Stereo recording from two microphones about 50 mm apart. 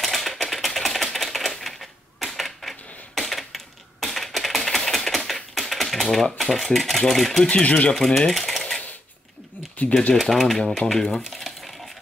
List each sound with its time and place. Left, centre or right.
0.0 s typewriter: centre
6.3 s speech: centre
7.4 s speech: left
7.9 s speech: centre
8.3 s typing: centre
10.1 s speech: centre
10.8 s speech: left
11.1 s a sound: centre